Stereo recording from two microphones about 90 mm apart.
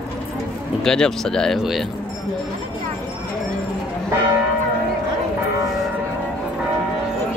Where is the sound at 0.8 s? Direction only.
5° left (ahead or behind).